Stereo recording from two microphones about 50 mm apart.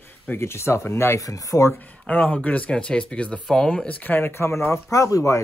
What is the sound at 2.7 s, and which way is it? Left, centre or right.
Speech, centre.